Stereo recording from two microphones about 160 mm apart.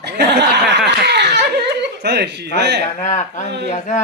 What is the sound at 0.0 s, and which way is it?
Snicker, 90° right.